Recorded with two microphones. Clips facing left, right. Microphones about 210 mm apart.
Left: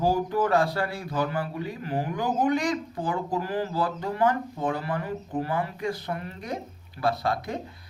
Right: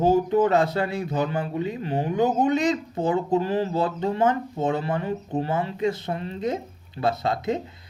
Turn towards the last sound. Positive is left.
turn(degrees=-20)  # may be behind; listen again after turning